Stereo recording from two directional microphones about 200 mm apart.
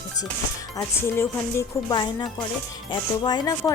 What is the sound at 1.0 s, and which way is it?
A woman's voice, 15° left (ahead or behind).